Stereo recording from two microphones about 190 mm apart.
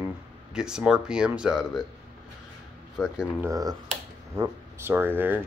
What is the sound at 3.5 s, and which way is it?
Speech, 20° right (ahead or behind).